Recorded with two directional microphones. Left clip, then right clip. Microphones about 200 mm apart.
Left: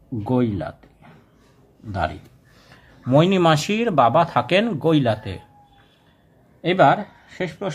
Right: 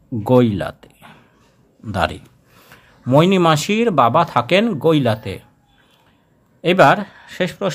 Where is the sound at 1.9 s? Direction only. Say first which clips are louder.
Right 5 dB; 45° right (ahead or behind).